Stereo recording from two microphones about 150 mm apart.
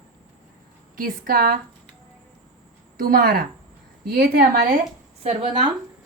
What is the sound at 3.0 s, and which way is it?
Speech, 70° right (ahead or behind).